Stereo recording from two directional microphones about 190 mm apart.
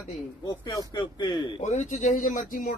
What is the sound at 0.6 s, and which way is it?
Speech, 20° left (ahead or behind).